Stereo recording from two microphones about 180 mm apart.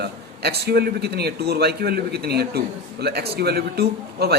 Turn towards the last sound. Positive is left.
turn(degrees=-60)  # may be behind; listen again after turning